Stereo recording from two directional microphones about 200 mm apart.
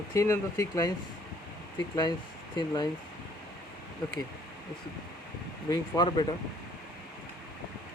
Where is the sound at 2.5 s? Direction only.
20° left (ahead or behind).